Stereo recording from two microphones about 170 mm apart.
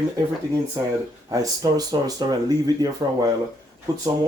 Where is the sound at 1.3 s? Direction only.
20° right (ahead or behind).